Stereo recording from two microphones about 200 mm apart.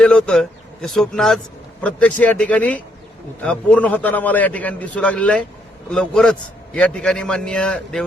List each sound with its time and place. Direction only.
0.0 s a man's voice: 5° left (ahead or behind)